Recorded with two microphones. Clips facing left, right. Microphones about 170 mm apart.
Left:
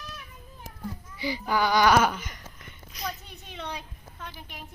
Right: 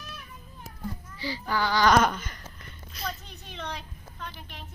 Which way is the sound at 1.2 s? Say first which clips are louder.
Left 3 dB; 15° left (ahead or behind).